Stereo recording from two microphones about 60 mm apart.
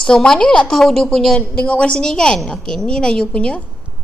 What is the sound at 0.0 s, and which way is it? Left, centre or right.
A woman's voice, centre.